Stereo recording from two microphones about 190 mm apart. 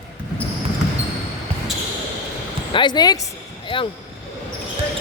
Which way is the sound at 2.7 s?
25° left (ahead or behind).